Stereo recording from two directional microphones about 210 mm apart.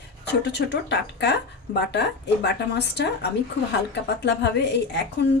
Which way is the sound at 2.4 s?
55° left (ahead or behind).